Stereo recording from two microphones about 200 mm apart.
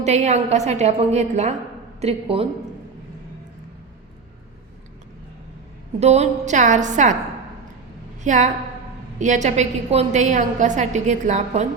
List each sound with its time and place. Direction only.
0.0 s a woman's voice: 35° right (ahead or behind)
6.0 s a woman's voice: 35° right (ahead or behind)
8.2 s a woman's voice: 40° right (ahead or behind)